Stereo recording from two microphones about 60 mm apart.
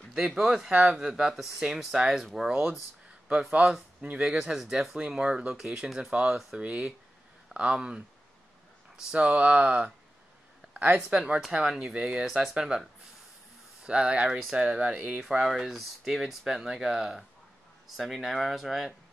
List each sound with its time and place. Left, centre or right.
0.1 s speech: centre
0.7 s speech: centre
4.0 s speech: centre
9.1 s speech: right
11.1 s speech: centre
13.8 s speech: centre
14.8 s speech: right
15.4 s speech: centre